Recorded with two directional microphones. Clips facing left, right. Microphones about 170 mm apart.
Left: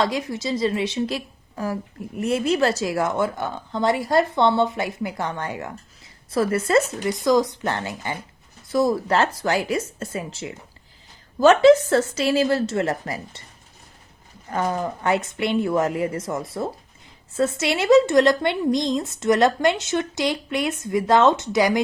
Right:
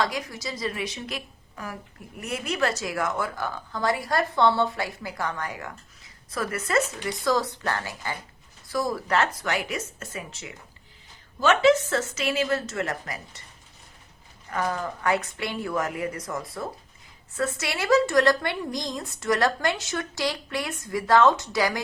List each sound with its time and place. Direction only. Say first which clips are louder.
0.0 s a woman's voice: left 5 dB; 25° left (ahead or behind)
7.1 s a woman's voice: left 7 dB; 15° left (ahead or behind)
14.5 s a woman's voice: left 4 dB; 25° left (ahead or behind)